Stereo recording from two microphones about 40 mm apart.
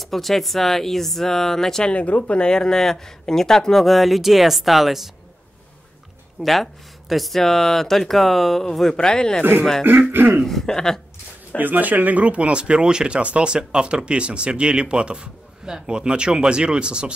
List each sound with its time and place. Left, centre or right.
0.0 s speech: centre
1.9 s speech: left
2.4 s speech: centre
6.4 s speech: centre
8.9 s a sound: centre
9.4 s speech: right
10.4 s a sound: centre
11.5 s speech: right